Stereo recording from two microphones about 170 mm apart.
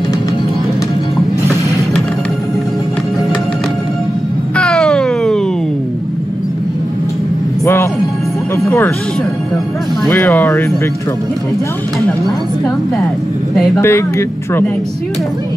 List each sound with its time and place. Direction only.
4.6 s a sound: 5° left (ahead or behind)
7.6 s music: 15° left (ahead or behind)
10.0 s speech: 15° left (ahead or behind)
13.7 s speech: 15° left (ahead or behind)